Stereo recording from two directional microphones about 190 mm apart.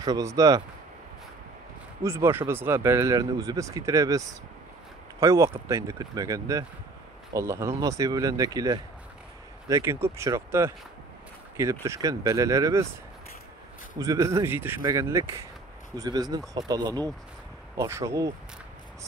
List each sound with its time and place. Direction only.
0.0 s speech: 20° right (ahead or behind)
2.0 s speech: 15° right (ahead or behind)
13.9 s speech: 20° right (ahead or behind)